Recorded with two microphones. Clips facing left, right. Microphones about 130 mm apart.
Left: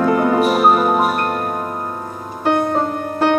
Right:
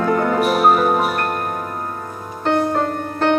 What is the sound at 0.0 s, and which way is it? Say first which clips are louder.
Music: left 2 dB; 10° left (ahead or behind).